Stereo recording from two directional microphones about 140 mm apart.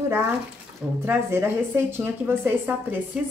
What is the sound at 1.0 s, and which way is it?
Speech, 15° right (ahead or behind).